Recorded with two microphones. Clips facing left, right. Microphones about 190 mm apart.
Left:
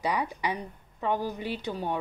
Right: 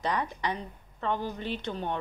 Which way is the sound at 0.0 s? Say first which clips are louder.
Left 1 dB; 10° left (ahead or behind).